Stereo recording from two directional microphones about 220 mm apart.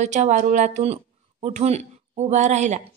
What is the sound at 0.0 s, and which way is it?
A woman's voice, 30° right (ahead or behind).